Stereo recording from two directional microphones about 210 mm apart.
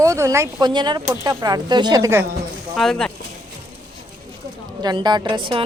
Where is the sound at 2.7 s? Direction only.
Centre (ahead or behind).